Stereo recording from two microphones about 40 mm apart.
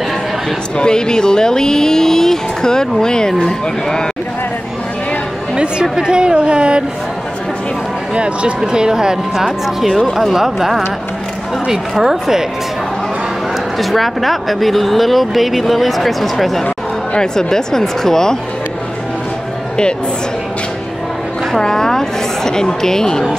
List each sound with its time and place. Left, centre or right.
0.7 s speech: centre
5.6 s a woman's voice: right
8.1 s a woman's voice: right
8.5 s speech: centre
11.9 s speech: centre
13.7 s speech: centre
17.1 s speech: centre
21.5 s speech: centre